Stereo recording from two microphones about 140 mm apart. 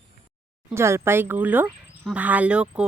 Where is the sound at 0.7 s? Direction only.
20° right (ahead or behind).